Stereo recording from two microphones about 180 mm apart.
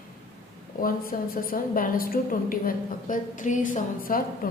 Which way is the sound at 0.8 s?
50° left (ahead or behind).